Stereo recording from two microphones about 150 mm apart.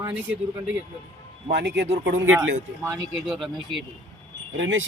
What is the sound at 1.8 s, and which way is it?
Speech, 45° right (ahead or behind).